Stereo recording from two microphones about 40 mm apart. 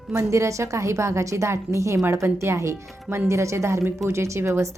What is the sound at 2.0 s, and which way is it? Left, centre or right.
Speech, right.